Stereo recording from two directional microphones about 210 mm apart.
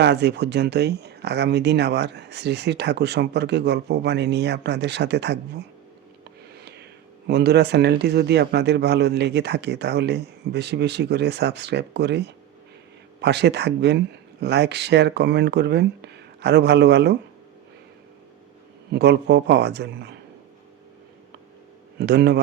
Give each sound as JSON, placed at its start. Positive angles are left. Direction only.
{"t": 0.0, "sound": "speech", "side_deg": -55}
{"t": 7.3, "sound": "speech", "side_deg": -50}
{"t": 18.9, "sound": "speech", "side_deg": -55}
{"t": 21.9, "sound": "speech", "side_deg": -50}